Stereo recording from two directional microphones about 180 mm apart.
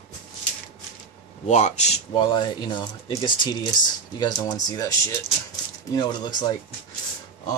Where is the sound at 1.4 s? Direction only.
40° left (ahead or behind); by 6.4 s 25° left (ahead or behind).